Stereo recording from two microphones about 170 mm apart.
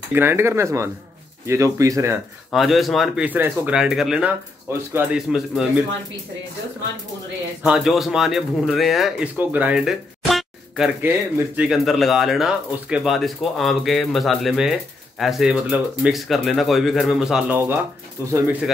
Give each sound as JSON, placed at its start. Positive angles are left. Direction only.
{"t": 0.1, "sound": "speech", "side_deg": -15}
{"t": 2.5, "sound": "speech", "side_deg": 0}
{"t": 5.3, "sound": "speech", "side_deg": 0}
{"t": 7.6, "sound": "speech", "side_deg": -5}
{"t": 9.4, "sound": "a sound", "side_deg": -10}
{"t": 11.0, "sound": "speech", "side_deg": -15}